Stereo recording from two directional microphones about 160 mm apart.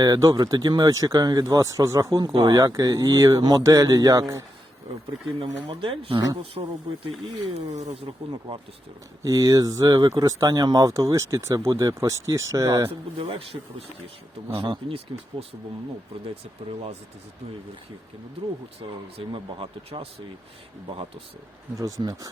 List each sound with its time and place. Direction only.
0.0 s speech: 20° right (ahead or behind)
5.4 s speech: 35° right (ahead or behind)
9.2 s speech: 20° right (ahead or behind)
13.1 s speech: 35° right (ahead or behind)
18.8 s speech: 35° right (ahead or behind)
21.8 s speech: 20° right (ahead or behind)